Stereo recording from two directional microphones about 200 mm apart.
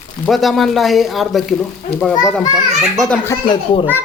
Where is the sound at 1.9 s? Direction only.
55° left (ahead or behind).